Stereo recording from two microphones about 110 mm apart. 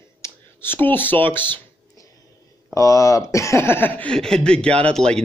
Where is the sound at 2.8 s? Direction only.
30° left (ahead or behind).